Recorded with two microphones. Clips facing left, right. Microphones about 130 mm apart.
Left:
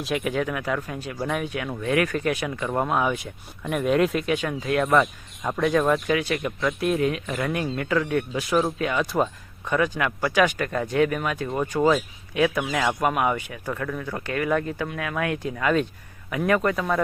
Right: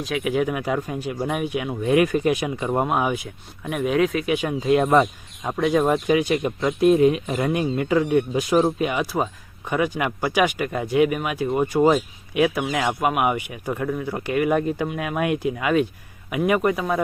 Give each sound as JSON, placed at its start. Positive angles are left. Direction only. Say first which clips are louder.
{"t": 0.0, "sound": "speech", "louder": "right 1 dB", "side_deg": 0}
{"t": 0.3, "sound": "speech", "louder": "right 3 dB", "side_deg": -15}
{"t": 3.2, "sound": "speech", "louder": "even", "side_deg": 0}
{"t": 5.5, "sound": "speech", "louder": "right 2 dB", "side_deg": -10}